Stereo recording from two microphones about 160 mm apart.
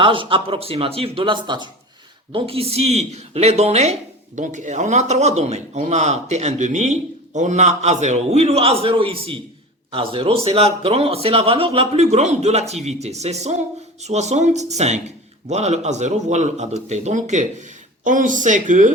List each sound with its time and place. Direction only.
0.0 s a man's voice: 30° right (ahead or behind); by 18.9 s 50° right (ahead or behind)